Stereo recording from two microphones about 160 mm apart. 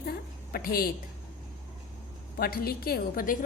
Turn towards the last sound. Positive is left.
turn(degrees=60)  # may be behind; listen again after turning